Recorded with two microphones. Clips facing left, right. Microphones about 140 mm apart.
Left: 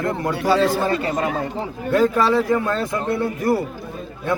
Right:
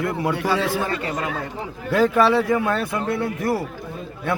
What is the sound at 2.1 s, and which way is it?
Speech, 5° right (ahead or behind).